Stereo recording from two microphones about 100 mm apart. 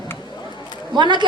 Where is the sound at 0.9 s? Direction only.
50° right (ahead or behind).